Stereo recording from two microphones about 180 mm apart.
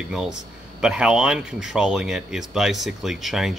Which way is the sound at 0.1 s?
5° right (ahead or behind).